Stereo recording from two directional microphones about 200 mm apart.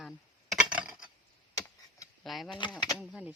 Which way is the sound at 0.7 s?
5° right (ahead or behind).